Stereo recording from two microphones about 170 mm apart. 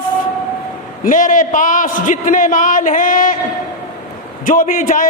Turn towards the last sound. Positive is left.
turn(degrees=50)  # may be behind; listen again after turning